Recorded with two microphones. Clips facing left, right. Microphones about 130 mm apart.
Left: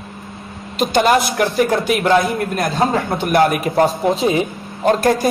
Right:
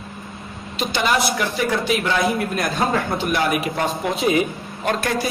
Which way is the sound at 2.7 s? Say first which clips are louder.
Left 4 dB; 25° left (ahead or behind).